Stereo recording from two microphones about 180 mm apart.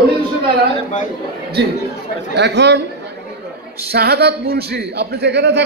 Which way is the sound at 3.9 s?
60° right (ahead or behind).